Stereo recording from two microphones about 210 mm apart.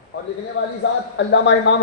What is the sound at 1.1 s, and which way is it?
Speech, 60° left (ahead or behind).